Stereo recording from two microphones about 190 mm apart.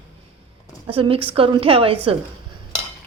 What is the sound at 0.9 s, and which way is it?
A woman's voice, 30° right (ahead or behind).